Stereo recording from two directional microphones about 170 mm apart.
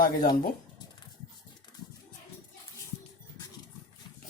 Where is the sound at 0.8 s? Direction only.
25° left (ahead or behind).